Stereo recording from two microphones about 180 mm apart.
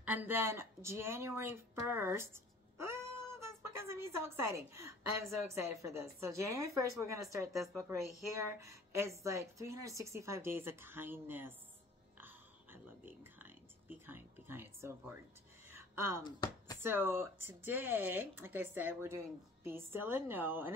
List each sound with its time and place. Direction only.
0.0 s speech: 10° right (ahead or behind)
12.2 s whispering: 10° right (ahead or behind)
15.7 s a sound: 15° right (ahead or behind)
16.3 s speech: 20° left (ahead or behind)
16.8 s speech: 10° right (ahead or behind)